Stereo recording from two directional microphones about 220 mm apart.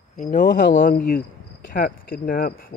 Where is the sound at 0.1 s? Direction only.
35° left (ahead or behind).